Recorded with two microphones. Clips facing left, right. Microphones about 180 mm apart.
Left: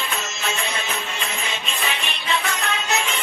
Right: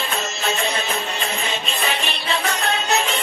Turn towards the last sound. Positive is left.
turn(degrees=-35)  # may be behind; listen again after turning